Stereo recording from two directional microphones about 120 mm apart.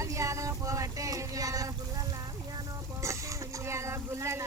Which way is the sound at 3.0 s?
25° right (ahead or behind).